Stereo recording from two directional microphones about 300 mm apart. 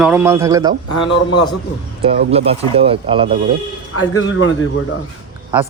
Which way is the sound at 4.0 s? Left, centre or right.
Left.